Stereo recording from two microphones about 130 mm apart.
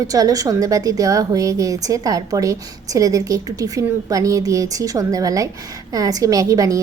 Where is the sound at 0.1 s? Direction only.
25° right (ahead or behind).